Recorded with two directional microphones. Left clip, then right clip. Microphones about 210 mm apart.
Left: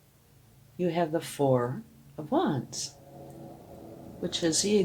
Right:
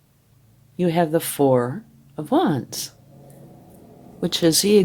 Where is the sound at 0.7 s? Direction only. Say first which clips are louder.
Right 8 dB; 50° right (ahead or behind).